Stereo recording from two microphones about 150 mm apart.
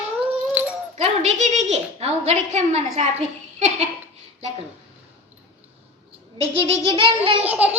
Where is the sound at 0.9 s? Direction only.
50° right (ahead or behind).